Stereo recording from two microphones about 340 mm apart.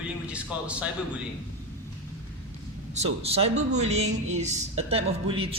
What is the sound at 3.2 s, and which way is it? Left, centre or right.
A woman's voice, centre.